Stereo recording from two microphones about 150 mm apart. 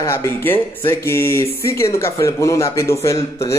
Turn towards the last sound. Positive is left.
turn(degrees=20)  # may be behind; listen again after turning